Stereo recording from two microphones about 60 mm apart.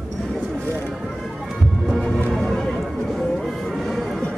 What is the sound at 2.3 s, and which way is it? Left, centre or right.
Music, centre.